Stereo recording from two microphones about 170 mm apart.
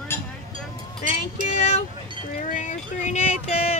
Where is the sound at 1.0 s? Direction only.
50° left (ahead or behind).